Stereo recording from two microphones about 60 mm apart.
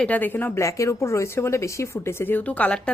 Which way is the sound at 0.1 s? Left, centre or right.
Left.